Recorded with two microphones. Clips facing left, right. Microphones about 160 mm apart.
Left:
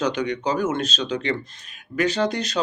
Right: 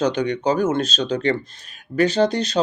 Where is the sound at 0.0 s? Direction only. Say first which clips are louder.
Right 3 dB; 30° right (ahead or behind).